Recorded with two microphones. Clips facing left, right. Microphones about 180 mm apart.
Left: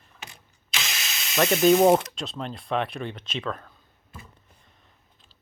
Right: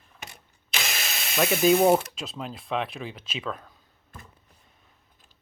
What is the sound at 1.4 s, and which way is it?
Speech, centre (ahead or behind).